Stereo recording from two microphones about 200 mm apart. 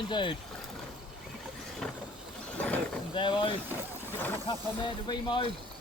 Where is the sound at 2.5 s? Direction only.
5° left (ahead or behind).